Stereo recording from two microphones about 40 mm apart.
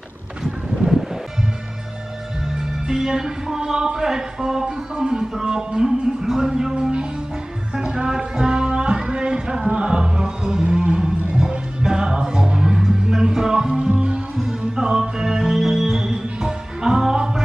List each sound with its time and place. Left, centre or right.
2.5 s speech: centre
7.7 s music: right